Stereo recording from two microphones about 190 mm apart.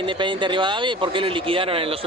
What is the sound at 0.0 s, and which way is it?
Speech, 25° right (ahead or behind).